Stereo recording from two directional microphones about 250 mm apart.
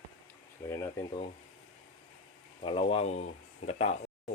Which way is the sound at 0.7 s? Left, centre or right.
Centre.